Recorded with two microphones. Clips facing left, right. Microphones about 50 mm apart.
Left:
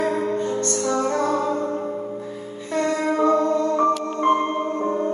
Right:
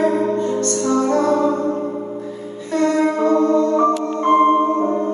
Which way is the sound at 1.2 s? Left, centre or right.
Right.